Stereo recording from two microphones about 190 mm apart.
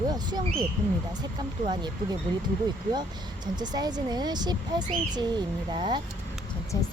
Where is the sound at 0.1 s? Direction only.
20° right (ahead or behind).